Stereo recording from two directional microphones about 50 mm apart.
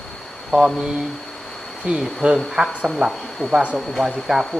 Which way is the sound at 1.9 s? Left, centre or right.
Right.